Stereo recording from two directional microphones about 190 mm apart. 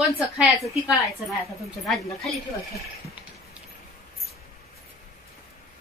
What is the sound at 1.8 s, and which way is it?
Speech, centre (ahead or behind).